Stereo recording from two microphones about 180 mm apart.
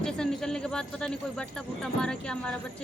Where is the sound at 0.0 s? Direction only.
5° left (ahead or behind).